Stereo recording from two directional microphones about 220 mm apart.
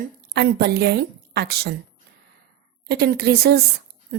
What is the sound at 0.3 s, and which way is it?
A woman's voice, 45° right (ahead or behind).